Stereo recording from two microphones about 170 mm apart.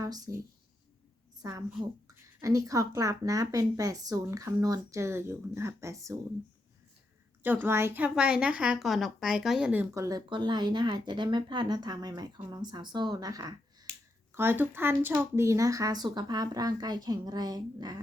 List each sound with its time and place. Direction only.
0.0 s speech: 20° right (ahead or behind)
1.4 s a woman's voice: 20° right (ahead or behind)
7.4 s a woman's voice: 10° right (ahead or behind)
9.9 s speech: 20° right (ahead or behind)